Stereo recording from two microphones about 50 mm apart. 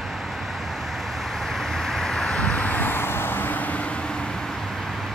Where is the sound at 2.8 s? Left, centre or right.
Left.